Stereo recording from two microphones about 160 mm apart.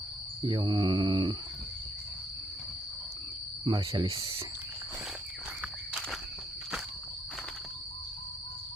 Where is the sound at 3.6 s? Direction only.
30° right (ahead or behind).